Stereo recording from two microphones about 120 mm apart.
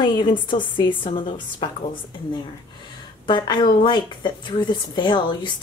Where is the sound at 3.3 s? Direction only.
40° left (ahead or behind).